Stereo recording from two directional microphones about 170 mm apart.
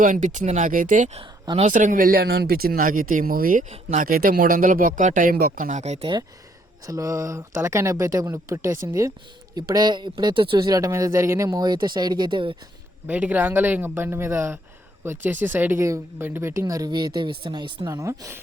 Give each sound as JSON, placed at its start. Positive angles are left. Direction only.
{"t": 0.0, "sound": "speech", "side_deg": -50}
{"t": 1.2, "sound": "speech", "side_deg": -30}
{"t": 1.7, "sound": "speech", "side_deg": -50}
{"t": 6.8, "sound": "speech", "side_deg": -20}
{"t": 13.1, "sound": "speech", "side_deg": -10}